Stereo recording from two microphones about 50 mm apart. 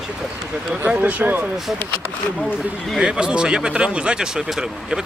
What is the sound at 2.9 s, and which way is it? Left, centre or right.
Speech, centre.